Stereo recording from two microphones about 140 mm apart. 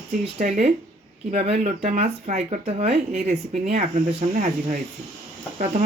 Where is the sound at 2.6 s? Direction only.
45° right (ahead or behind).